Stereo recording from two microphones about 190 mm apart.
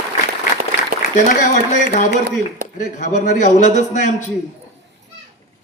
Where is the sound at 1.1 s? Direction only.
40° left (ahead or behind).